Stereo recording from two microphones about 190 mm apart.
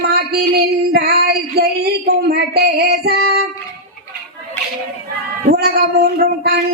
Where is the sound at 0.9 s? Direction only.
55° right (ahead or behind).